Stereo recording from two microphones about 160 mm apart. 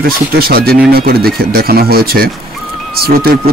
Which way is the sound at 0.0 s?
70° right (ahead or behind).